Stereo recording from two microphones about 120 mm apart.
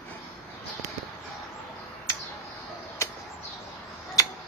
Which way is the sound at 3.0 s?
25° left (ahead or behind).